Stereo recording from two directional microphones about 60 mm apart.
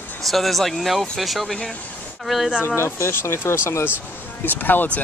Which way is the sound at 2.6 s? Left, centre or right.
Left.